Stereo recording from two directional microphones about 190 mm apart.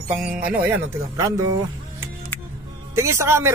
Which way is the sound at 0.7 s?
15° right (ahead or behind).